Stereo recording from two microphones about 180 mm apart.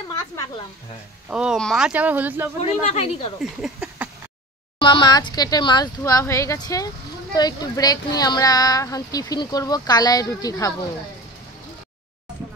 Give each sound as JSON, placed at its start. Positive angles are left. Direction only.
{"t": 1.3, "sound": "speech", "side_deg": -5}
{"t": 2.6, "sound": "speech", "side_deg": 35}
{"t": 3.6, "sound": "a sound", "side_deg": -5}
{"t": 4.7, "sound": "speech", "side_deg": 25}